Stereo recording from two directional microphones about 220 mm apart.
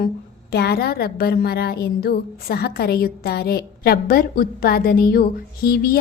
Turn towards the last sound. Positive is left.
turn(degrees=45)  # may be behind; listen again after turning